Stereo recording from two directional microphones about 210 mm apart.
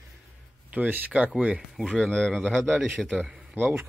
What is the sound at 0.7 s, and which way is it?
Speech, 5° right (ahead or behind).